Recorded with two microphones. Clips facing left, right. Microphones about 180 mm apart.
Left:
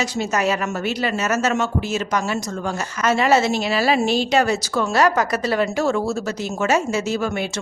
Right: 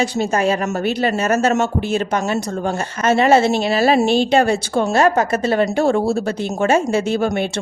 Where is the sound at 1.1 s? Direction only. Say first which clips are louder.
Right 3 dB; 30° right (ahead or behind).